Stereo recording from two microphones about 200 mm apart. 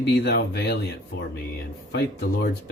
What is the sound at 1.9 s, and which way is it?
Speech, 55° left (ahead or behind).